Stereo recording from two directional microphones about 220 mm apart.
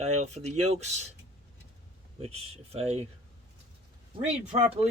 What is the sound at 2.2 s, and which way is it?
Speech, 25° right (ahead or behind).